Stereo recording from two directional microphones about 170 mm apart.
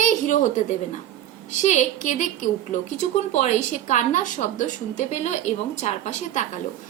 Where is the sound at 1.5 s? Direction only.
45° left (ahead or behind).